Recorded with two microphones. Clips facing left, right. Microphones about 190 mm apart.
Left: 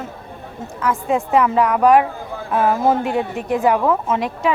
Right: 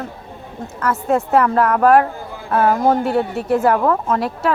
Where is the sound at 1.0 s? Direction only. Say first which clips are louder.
Right 2 dB; centre (ahead or behind).